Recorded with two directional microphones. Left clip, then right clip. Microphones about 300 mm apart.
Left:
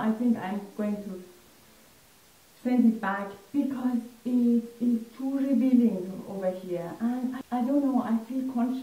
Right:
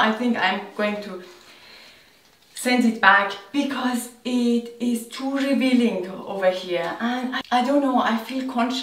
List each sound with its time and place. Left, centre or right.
0.0 s speech: centre
2.6 s speech: centre
4.2 s a sound: right
5.1 s speech: centre
6.0 s speech: right